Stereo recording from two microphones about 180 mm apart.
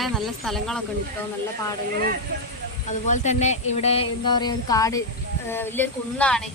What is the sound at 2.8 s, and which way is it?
Speech, 40° left (ahead or behind).